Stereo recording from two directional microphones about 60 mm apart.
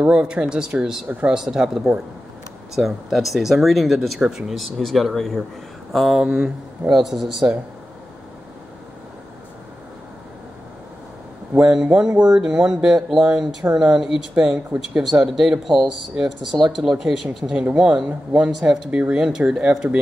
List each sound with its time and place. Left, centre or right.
0.0 s speech: centre
11.5 s speech: centre
14.3 s speech: centre
15.0 s speech: centre
17.7 s speech: centre
18.5 s speech: centre